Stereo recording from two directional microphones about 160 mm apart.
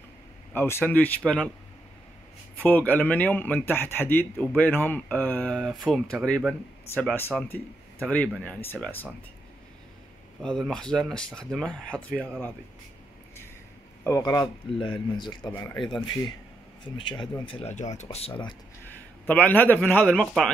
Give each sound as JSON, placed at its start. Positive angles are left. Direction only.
{"t": 0.5, "sound": "speech", "side_deg": 15}
{"t": 2.6, "sound": "speech", "side_deg": 10}
{"t": 10.4, "sound": "speech", "side_deg": 5}
{"t": 14.0, "sound": "speech", "side_deg": 20}
{"t": 15.5, "sound": "speech", "side_deg": 15}
{"t": 17.7, "sound": "speech", "side_deg": 45}
{"t": 19.2, "sound": "speech", "side_deg": 10}